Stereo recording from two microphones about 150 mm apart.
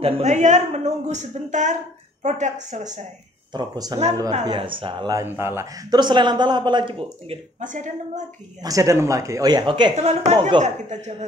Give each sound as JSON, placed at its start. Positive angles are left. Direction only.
{"t": 0.0, "sound": "a woman's voice", "side_deg": -50}
{"t": 3.5, "sound": "a man's voice", "side_deg": -25}
{"t": 5.1, "sound": "a man's voice", "side_deg": -15}
{"t": 7.6, "sound": "a woman's voice", "side_deg": -55}
{"t": 8.6, "sound": "a man's voice", "side_deg": -20}
{"t": 9.9, "sound": "a woman's voice", "side_deg": -50}